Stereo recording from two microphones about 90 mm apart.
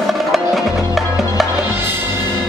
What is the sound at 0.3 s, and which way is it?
Music, centre (ahead or behind).